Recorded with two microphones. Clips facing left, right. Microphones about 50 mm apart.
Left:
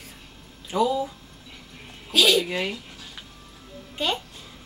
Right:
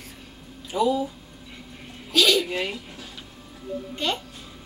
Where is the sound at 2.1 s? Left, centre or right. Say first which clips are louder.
Even; centre.